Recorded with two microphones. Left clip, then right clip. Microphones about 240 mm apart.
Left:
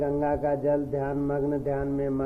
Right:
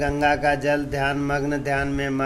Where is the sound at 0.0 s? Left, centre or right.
Right.